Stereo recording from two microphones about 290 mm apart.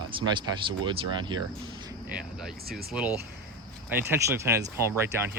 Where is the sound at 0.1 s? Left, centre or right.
Centre.